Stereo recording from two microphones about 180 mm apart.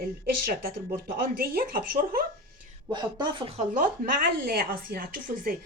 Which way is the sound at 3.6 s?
50° right (ahead or behind).